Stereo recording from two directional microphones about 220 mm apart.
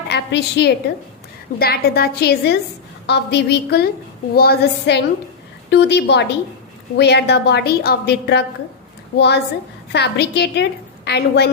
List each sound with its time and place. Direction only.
0.1 s a woman's voice: 50° left (ahead or behind)